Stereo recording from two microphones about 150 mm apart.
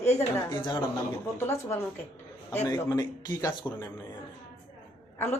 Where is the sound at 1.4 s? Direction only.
15° left (ahead or behind).